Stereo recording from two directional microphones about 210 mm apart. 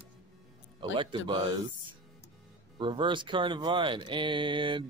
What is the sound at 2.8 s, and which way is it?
Speech, 25° right (ahead or behind).